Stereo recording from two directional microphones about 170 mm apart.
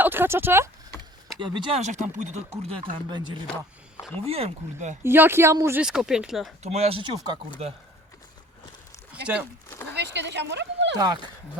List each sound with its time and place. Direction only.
0.0 s speech: 10° right (ahead or behind)
1.4 s speech: 30° right (ahead or behind)
2.9 s speech: 25° right (ahead or behind)
5.0 s speech: 15° right (ahead or behind)
5.8 s speech: 5° right (ahead or behind)
6.6 s speech: 40° right (ahead or behind)
9.2 s speech: 5° right (ahead or behind)
9.6 s a sound: 15° left (ahead or behind)
9.9 s a sound: 90° right
10.9 s speech: 25° right (ahead or behind)